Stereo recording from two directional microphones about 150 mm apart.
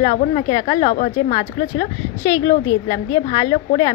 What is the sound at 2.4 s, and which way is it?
A woman's voice, 25° left (ahead or behind).